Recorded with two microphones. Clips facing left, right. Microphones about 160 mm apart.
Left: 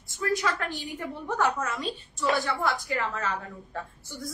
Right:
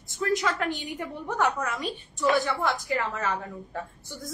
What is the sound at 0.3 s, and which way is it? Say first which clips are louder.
A woman's voice: right 2 dB; 20° right (ahead or behind).